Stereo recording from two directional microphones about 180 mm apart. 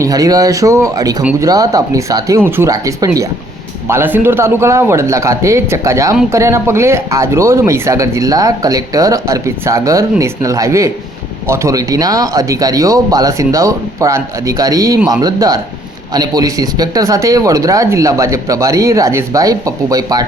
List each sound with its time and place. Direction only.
0.0 s speech: 20° right (ahead or behind)